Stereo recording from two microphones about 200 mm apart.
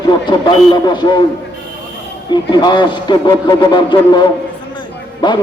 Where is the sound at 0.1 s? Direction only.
20° left (ahead or behind).